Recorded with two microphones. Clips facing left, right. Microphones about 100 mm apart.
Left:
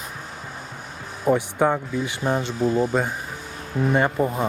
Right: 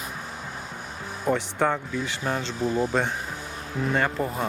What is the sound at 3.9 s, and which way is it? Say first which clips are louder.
Speech: left 4 dB; 15° left (ahead or behind).